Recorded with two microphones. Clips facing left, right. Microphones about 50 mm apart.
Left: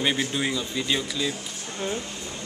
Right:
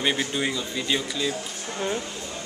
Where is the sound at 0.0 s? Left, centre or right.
Centre.